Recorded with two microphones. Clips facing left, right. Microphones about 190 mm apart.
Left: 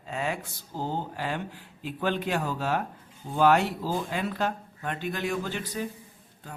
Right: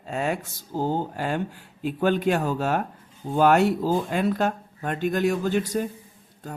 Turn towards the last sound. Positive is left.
turn(degrees=-45)  # may be behind; listen again after turning